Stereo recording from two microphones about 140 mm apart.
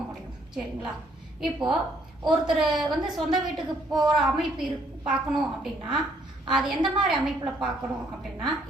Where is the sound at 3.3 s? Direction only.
30° right (ahead or behind).